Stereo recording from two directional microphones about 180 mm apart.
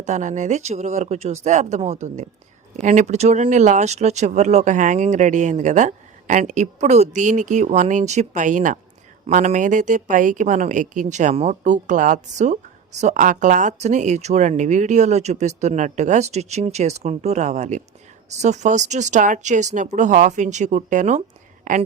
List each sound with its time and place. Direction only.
0.0 s a woman's voice: 40° right (ahead or behind)